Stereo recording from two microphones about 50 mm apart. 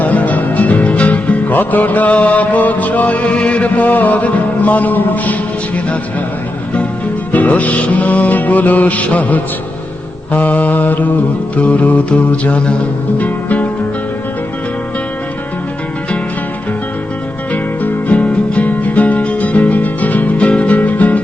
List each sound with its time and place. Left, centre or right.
0.0 s music: left
7.3 s music: left
10.3 s mantra: left
11.5 s music: left
17.5 s music: left